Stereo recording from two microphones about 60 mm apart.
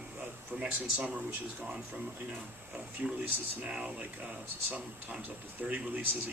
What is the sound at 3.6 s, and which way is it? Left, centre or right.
Speech, centre.